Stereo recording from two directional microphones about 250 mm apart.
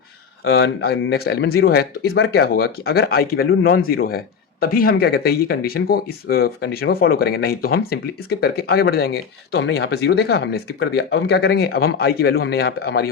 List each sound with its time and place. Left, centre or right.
0.4 s speech: left